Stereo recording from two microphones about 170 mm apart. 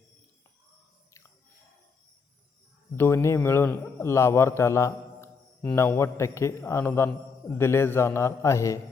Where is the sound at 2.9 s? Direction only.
15° left (ahead or behind).